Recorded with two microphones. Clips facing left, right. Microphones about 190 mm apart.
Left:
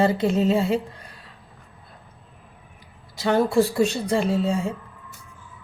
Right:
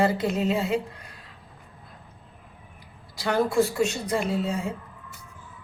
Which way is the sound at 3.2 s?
25° left (ahead or behind).